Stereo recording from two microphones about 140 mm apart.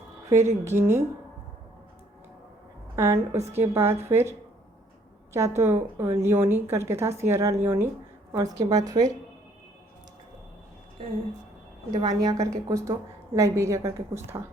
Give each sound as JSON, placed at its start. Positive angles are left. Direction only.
{"t": 0.3, "sound": "a woman's voice", "side_deg": -20}
{"t": 2.9, "sound": "a woman's voice", "side_deg": -20}
{"t": 11.9, "sound": "a woman's voice", "side_deg": -30}